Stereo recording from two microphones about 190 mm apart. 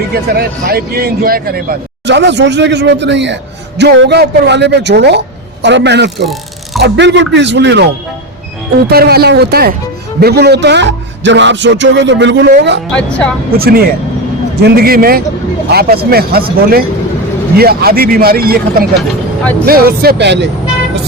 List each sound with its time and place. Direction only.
0.1 s a man's voice: 55° right (ahead or behind)
8.9 s a man's voice: 55° right (ahead or behind)
12.9 s a woman's voice: 5° left (ahead or behind)
13.6 s a man's voice: 55° right (ahead or behind)